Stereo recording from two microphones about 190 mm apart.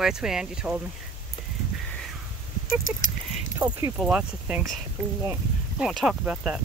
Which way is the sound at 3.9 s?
Centre (ahead or behind).